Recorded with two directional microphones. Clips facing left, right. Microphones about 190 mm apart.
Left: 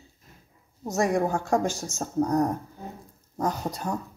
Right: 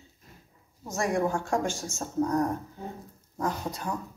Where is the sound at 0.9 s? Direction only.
40° left (ahead or behind).